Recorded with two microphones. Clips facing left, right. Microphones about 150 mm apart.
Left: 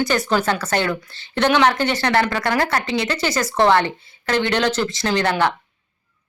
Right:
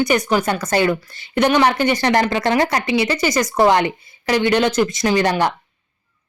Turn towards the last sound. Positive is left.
turn(degrees=-10)  # may be behind; listen again after turning